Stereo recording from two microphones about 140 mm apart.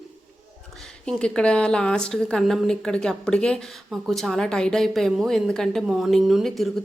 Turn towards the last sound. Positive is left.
turn(degrees=0)  # may be behind; listen again after turning